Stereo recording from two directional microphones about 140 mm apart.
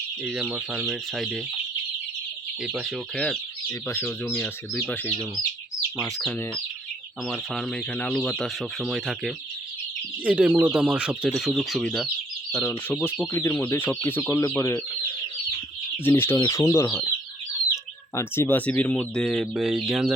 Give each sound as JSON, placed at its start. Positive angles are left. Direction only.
{"t": 0.2, "sound": "speech", "side_deg": -5}
{"t": 2.6, "sound": "speech", "side_deg": -10}
{"t": 3.2, "sound": "speech", "side_deg": 10}
{"t": 6.3, "sound": "speech", "side_deg": 10}
{"t": 12.6, "sound": "speech", "side_deg": 15}
{"t": 16.0, "sound": "speech", "side_deg": 15}
{"t": 18.1, "sound": "speech", "side_deg": 20}